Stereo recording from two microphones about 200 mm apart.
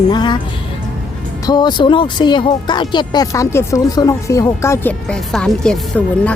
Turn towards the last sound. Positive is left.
turn(degrees=5)  # may be behind; listen again after turning